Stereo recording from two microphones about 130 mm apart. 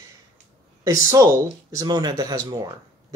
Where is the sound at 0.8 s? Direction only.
25° right (ahead or behind).